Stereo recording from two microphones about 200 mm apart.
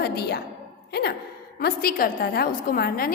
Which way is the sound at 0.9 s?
55° left (ahead or behind).